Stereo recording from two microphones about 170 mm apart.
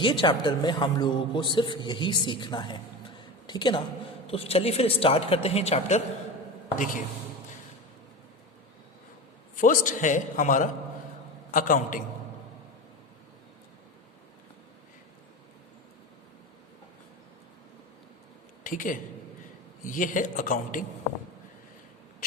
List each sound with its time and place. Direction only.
0.0 s a man's voice: 30° left (ahead or behind)
6.7 s a man's voice: 55° left (ahead or behind)
9.6 s a man's voice: 50° left (ahead or behind)
18.6 s a man's voice: 50° left (ahead or behind)